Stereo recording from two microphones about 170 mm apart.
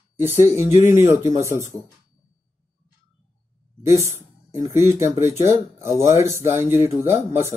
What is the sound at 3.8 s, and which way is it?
Speech, 15° right (ahead or behind).